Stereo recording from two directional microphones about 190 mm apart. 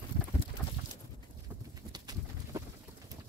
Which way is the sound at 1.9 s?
20° right (ahead or behind).